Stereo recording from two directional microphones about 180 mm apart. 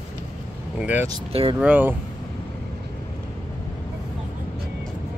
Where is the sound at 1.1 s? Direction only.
30° right (ahead or behind).